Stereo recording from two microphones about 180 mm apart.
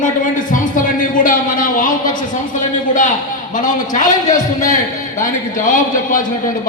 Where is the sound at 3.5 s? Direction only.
45° left (ahead or behind).